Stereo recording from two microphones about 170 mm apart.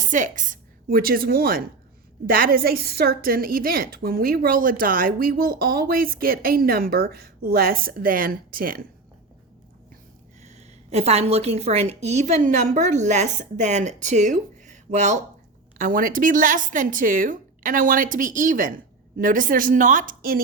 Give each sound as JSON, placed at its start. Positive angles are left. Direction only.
{"t": 0.0, "sound": "a woman's voice", "side_deg": -50}
{"t": 10.4, "sound": "a woman's voice", "side_deg": -40}
{"t": 15.8, "sound": "a woman's voice", "side_deg": -55}